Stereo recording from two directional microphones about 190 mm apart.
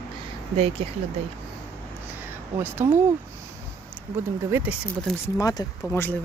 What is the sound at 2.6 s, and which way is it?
Speech, 10° right (ahead or behind).